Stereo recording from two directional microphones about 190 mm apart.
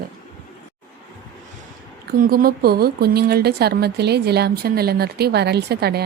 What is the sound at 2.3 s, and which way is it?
A woman's voice, 50° right (ahead or behind).